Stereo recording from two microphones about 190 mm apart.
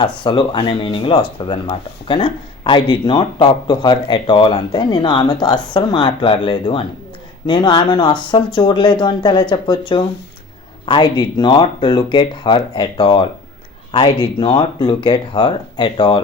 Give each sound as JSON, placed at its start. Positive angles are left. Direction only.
{"t": 0.0, "sound": "speech", "side_deg": 25}